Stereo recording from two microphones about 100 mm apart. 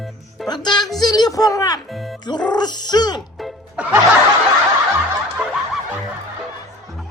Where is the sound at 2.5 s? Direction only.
45° left (ahead or behind).